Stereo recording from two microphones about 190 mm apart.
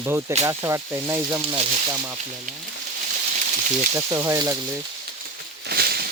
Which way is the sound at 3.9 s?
15° right (ahead or behind).